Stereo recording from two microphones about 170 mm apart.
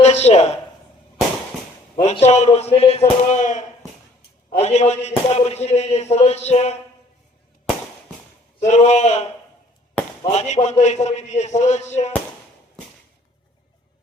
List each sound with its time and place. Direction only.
0.0 s a sound: 40° left (ahead or behind)
2.0 s speech: 40° left (ahead or behind)
8.6 s speech: 40° left (ahead or behind)
10.3 s a man's voice: 40° left (ahead or behind)